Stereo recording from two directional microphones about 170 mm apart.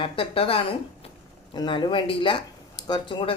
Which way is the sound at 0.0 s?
35° left (ahead or behind).